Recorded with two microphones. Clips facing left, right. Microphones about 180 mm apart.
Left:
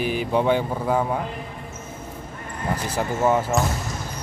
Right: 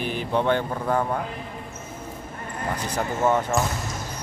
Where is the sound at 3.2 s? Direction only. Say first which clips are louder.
Left 1 dB; 5° left (ahead or behind).